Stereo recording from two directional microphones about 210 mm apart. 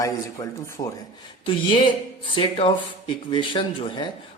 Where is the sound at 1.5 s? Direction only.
25° left (ahead or behind).